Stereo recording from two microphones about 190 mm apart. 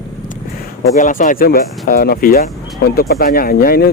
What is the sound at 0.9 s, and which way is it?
Speech, 45° left (ahead or behind).